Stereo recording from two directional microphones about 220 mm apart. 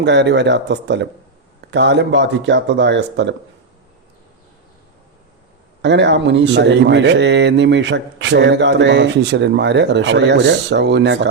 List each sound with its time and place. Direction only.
0.0 s speech: 50° right (ahead or behind)
5.8 s speech: 50° right (ahead or behind)